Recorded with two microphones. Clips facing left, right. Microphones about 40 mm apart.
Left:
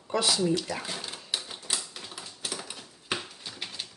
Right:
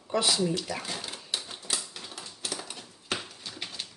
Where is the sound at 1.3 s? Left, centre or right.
Centre.